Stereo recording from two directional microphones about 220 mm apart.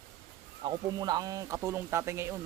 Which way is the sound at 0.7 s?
20° right (ahead or behind).